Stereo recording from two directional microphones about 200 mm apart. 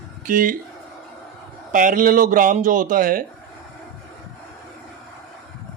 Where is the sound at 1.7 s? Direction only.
40° right (ahead or behind).